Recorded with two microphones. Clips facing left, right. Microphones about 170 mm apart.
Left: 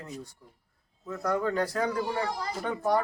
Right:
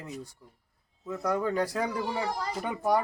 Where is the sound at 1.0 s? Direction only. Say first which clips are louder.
Even; 10° right (ahead or behind).